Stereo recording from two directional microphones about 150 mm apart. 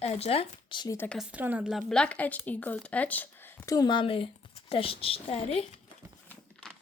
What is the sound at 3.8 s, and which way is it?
A woman's voice, 30° left (ahead or behind).